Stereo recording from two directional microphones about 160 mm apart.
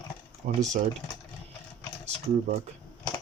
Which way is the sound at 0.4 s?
55° right (ahead or behind).